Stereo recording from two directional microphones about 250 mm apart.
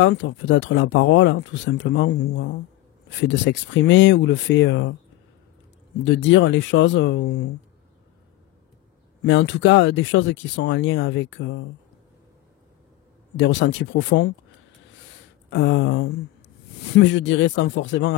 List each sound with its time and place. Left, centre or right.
0.0 s speech: left
6.0 s speech: left
9.2 s speech: left
13.4 s speech: left
15.5 s speech: left